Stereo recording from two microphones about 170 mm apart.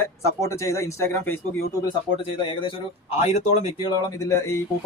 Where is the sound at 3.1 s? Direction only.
40° left (ahead or behind).